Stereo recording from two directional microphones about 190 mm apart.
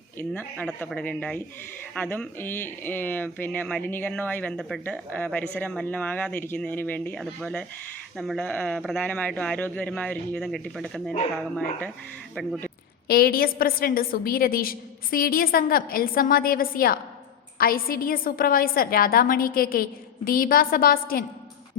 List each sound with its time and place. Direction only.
0.2 s speech: 10° left (ahead or behind)
13.1 s a woman's voice: 55° left (ahead or behind)